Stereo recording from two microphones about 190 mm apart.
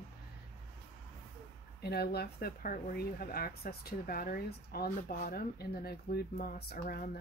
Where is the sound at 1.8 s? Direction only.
55° left (ahead or behind).